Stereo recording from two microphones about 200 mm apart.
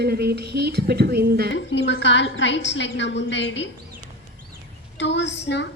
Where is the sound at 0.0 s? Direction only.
55° right (ahead or behind).